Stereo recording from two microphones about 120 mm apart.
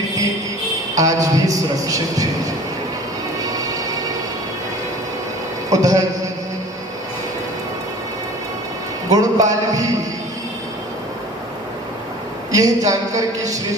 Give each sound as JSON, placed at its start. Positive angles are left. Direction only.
{"t": 0.9, "sound": "a man's voice", "side_deg": -30}
{"t": 3.4, "sound": "music", "side_deg": -30}
{"t": 5.7, "sound": "a man's voice", "side_deg": -30}
{"t": 9.0, "sound": "a man's voice", "side_deg": -30}
{"t": 12.5, "sound": "a man's voice", "side_deg": -30}